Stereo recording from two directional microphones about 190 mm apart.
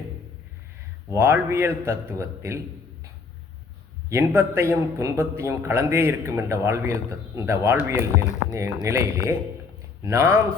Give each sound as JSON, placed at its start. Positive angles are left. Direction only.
{"t": 1.1, "sound": "a man's voice", "side_deg": -15}
{"t": 4.1, "sound": "a man's voice", "side_deg": -10}